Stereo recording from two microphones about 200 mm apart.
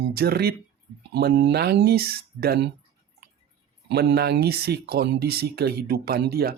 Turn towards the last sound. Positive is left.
turn(degrees=-50)  # may be behind; listen again after turning